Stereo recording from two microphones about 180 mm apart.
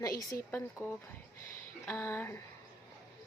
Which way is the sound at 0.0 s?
20° left (ahead or behind).